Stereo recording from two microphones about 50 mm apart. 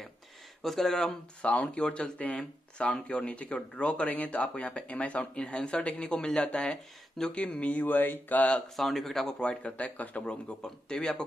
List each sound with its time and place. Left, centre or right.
0.6 s speech: centre
1.4 s speech: left
8.7 s speech: centre
9.4 s speech: left
10.6 s speech: centre